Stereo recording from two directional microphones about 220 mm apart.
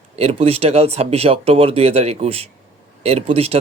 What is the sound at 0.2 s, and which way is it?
Speech, 25° right (ahead or behind).